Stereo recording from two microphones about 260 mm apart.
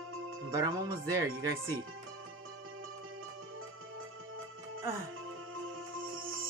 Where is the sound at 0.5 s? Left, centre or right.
Centre.